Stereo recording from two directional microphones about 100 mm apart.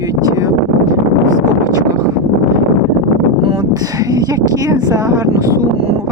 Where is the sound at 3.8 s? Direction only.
40° right (ahead or behind).